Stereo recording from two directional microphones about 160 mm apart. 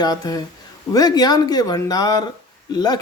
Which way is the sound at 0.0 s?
25° left (ahead or behind).